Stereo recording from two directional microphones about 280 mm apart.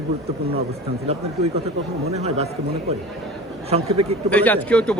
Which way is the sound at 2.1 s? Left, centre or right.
Right.